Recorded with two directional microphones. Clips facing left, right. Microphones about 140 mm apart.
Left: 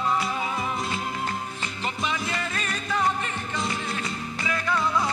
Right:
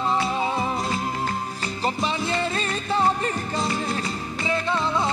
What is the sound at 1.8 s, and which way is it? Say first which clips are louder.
Music: right 4 dB; 35° right (ahead or behind).